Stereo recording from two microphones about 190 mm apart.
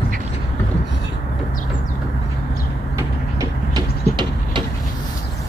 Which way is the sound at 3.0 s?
20° right (ahead or behind).